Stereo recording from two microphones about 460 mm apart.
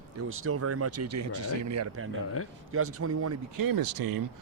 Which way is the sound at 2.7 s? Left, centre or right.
Right.